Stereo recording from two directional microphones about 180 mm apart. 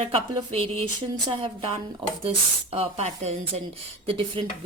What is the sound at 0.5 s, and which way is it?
Speech, 30° right (ahead or behind).